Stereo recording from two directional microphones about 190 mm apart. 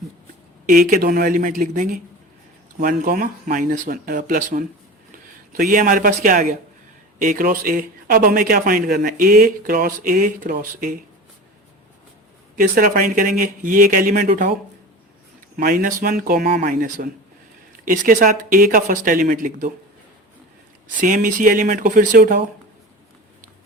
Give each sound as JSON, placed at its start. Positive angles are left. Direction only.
{"t": 0.7, "sound": "speech", "side_deg": -50}
{"t": 12.5, "sound": "speech", "side_deg": -50}
{"t": 15.5, "sound": "speech", "side_deg": -45}
{"t": 21.0, "sound": "speech", "side_deg": -45}